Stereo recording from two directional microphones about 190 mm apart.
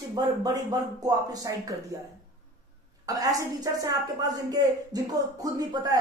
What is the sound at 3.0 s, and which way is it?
Speech, 20° right (ahead or behind).